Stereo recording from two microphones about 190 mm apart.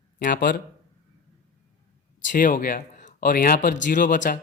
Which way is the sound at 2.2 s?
45° left (ahead or behind).